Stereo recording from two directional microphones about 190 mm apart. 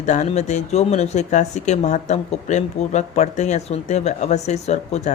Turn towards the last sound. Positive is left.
turn(degrees=35)  # may be behind; listen again after turning